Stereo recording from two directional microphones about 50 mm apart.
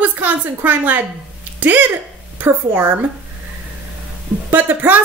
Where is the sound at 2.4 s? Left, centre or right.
Right.